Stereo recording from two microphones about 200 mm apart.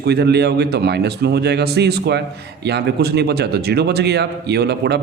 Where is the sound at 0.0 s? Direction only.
55° right (ahead or behind).